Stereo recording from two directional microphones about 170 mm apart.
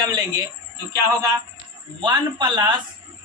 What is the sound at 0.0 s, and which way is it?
Speech, 20° right (ahead or behind).